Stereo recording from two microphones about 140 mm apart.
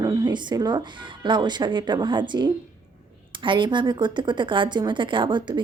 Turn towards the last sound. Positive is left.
turn(degrees=-35)  # may be behind; listen again after turning